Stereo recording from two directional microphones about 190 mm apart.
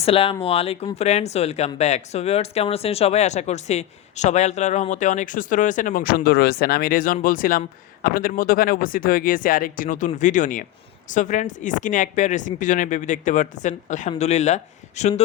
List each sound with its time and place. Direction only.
0.0 s speech: 30° left (ahead or behind)